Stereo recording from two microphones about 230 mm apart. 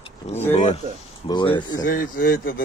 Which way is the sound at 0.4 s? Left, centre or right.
Centre.